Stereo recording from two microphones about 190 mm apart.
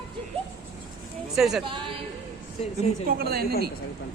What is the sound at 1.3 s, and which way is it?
Speech, centre (ahead or behind).